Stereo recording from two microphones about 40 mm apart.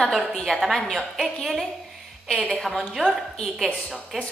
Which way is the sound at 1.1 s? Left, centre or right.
Centre.